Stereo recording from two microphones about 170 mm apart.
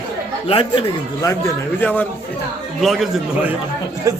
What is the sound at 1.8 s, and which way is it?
Speech, 10° left (ahead or behind).